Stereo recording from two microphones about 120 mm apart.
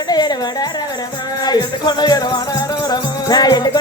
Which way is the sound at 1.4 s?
35° left (ahead or behind).